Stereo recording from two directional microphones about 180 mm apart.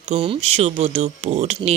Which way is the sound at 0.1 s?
35° right (ahead or behind).